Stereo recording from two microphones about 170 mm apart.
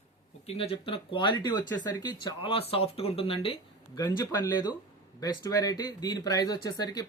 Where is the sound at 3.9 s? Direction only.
20° left (ahead or behind).